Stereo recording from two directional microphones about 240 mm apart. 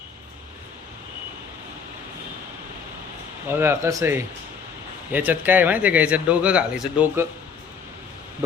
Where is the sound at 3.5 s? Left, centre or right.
Centre.